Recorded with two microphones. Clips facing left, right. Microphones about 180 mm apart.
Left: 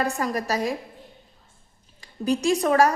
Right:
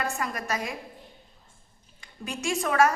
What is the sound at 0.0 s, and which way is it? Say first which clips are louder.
Speech: left 6 dB; 35° left (ahead or behind).